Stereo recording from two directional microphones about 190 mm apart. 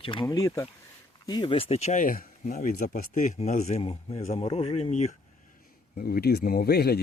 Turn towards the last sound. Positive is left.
turn(degrees=55)  # may be behind; listen again after turning